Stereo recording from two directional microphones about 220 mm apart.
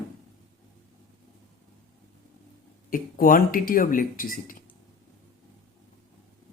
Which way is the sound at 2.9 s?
40° left (ahead or behind).